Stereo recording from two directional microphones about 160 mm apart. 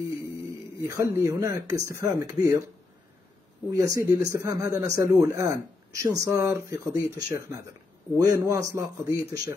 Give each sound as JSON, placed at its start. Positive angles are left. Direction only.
{"t": 0.7, "sound": "speech", "side_deg": -20}
{"t": 3.7, "sound": "speech", "side_deg": -20}